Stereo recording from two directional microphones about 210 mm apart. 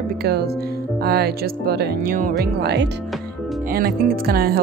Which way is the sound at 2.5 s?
50° right (ahead or behind).